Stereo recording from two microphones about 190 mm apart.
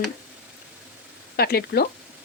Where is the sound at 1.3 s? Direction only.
55° left (ahead or behind).